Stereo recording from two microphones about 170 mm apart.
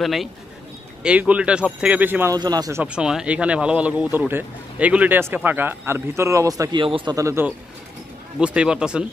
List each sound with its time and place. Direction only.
0.0 s speech: centre (ahead or behind)
2.3 s speech: 25° right (ahead or behind)
2.8 s speech: 5° right (ahead or behind)